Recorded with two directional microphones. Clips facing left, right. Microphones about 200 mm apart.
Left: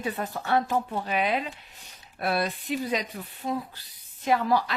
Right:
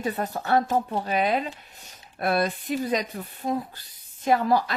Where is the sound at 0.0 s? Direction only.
40° right (ahead or behind).